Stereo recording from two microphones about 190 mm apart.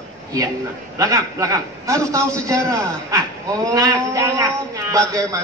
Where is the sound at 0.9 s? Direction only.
15° right (ahead or behind).